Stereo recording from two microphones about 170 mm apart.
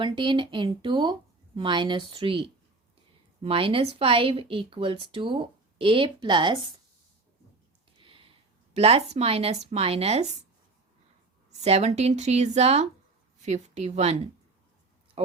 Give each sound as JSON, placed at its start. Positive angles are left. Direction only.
{"t": 0.0, "sound": "a woman's voice", "side_deg": -30}
{"t": 7.9, "sound": "a sound", "side_deg": -30}
{"t": 8.7, "sound": "a woman's voice", "side_deg": -40}
{"t": 11.6, "sound": "a woman's voice", "side_deg": -40}